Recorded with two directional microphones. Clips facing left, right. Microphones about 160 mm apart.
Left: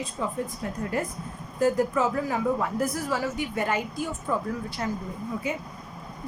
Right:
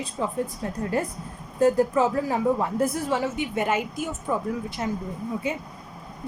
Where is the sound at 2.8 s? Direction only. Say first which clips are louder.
Right 3 dB; 25° right (ahead or behind).